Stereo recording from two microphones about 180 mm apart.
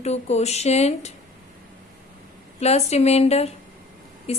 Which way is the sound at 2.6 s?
35° left (ahead or behind).